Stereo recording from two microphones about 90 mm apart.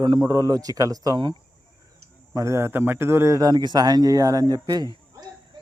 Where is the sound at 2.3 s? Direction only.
30° right (ahead or behind).